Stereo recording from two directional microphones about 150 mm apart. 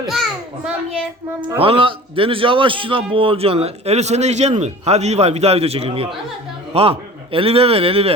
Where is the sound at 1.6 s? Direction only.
35° right (ahead or behind).